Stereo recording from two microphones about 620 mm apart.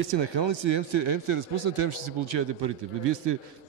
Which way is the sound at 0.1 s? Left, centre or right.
Right.